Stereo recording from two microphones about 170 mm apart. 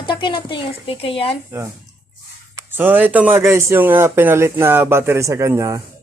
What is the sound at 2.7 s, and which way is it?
Speech, 10° right (ahead or behind).